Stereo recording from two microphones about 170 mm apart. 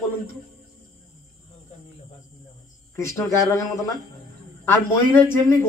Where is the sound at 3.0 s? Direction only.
15° left (ahead or behind).